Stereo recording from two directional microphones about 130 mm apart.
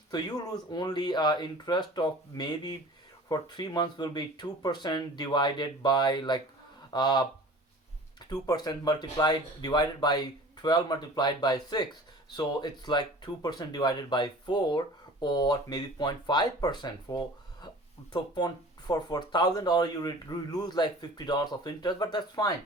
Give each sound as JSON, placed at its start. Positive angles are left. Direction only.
{"t": 0.1, "sound": "speech", "side_deg": 30}